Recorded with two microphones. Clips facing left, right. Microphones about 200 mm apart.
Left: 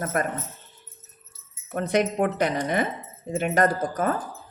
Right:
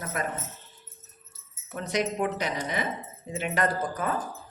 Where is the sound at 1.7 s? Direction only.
55° left (ahead or behind).